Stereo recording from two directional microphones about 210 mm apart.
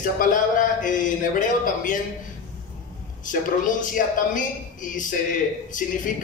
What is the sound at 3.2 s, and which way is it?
A woman's voice, 40° left (ahead or behind).